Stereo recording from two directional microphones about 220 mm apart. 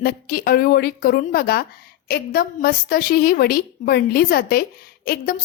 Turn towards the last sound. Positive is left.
turn(degrees=40)  # may be behind; listen again after turning